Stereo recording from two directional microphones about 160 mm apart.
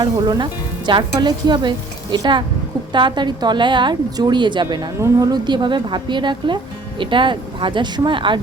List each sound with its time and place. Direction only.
0.0 s a woman's voice: 25° right (ahead or behind)